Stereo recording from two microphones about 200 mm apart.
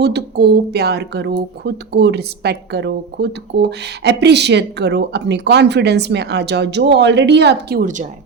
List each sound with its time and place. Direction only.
0.0 s speech: 55° right (ahead or behind)